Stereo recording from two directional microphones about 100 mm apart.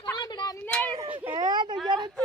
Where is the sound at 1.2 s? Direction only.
45° right (ahead or behind).